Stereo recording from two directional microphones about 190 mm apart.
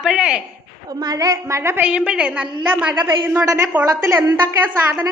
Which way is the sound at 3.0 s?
25° right (ahead or behind).